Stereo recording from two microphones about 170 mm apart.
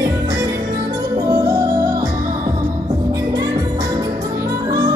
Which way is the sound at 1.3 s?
15° right (ahead or behind).